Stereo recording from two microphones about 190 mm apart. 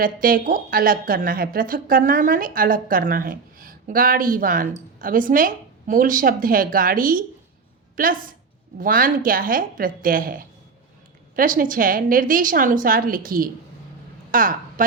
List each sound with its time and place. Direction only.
0.0 s a woman's voice: 50° right (ahead or behind)